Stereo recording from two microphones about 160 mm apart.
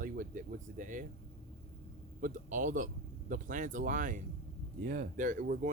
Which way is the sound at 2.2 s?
55° right (ahead or behind).